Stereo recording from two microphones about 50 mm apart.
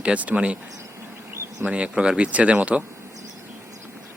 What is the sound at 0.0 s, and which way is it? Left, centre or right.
Speech, right.